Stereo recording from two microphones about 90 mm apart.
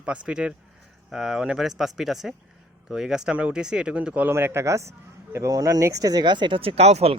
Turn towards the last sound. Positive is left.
turn(degrees=-90)